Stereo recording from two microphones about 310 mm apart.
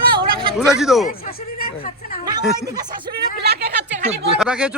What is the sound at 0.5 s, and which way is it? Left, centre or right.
Speech, centre.